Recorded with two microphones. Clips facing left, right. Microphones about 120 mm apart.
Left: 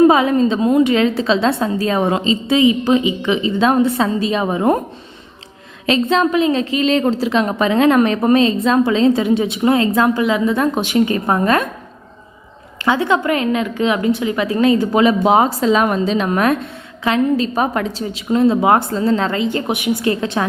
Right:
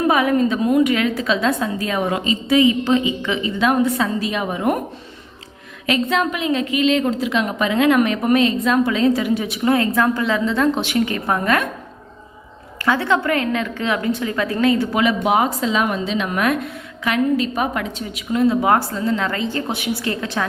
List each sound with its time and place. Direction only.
0.0 s a woman's voice: 25° left (ahead or behind)
3.6 s a woman's voice: 30° left (ahead or behind)
5.8 s a woman's voice: 30° left (ahead or behind)
12.8 s a woman's voice: 20° left (ahead or behind)
19.0 s a woman's voice: 35° left (ahead or behind)
19.3 s a woman's voice: 20° left (ahead or behind)